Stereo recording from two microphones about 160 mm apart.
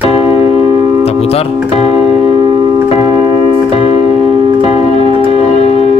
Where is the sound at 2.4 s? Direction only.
30° right (ahead or behind).